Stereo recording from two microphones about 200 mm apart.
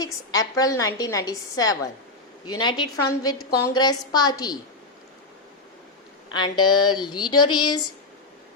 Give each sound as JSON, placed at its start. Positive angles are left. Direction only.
{"t": 0.0, "sound": "a woman's voice", "side_deg": 20}
{"t": 2.8, "sound": "a woman's voice", "side_deg": 90}
{"t": 3.6, "sound": "speech", "side_deg": 20}
{"t": 6.3, "sound": "speech", "side_deg": 20}